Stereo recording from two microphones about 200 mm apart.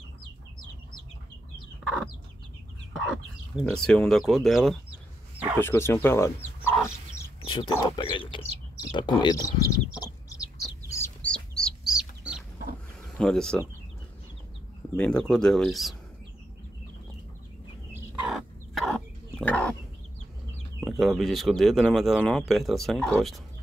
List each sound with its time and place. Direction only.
2.9 s speech: centre (ahead or behind)
5.6 s chicken: 10° left (ahead or behind)
7.4 s a sound: 25° left (ahead or behind)
7.8 s speech: 25° left (ahead or behind)
10.9 s chicken: 10° left (ahead or behind)
13.2 s speech: 5° left (ahead or behind)
15.0 s speech: 5° left (ahead or behind)
17.9 s chicken: centre (ahead or behind)
21.0 s speech: centre (ahead or behind)